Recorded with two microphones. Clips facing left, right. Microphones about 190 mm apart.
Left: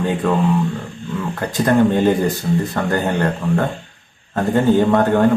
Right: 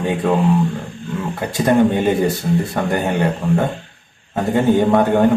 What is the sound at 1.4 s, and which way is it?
Speech, 10° right (ahead or behind).